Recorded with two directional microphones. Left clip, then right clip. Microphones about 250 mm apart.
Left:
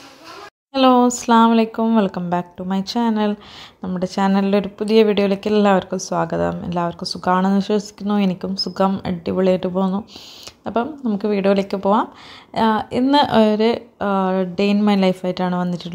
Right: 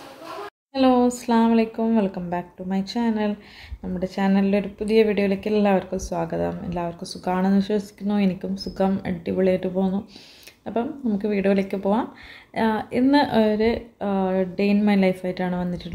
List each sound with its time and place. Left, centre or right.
0.7 s a woman's voice: left